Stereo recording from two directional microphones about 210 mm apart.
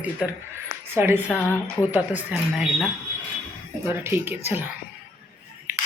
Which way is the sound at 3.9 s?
10° right (ahead or behind).